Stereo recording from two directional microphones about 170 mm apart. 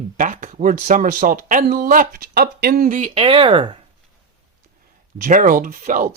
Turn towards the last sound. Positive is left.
turn(degrees=-50)  # may be behind; listen again after turning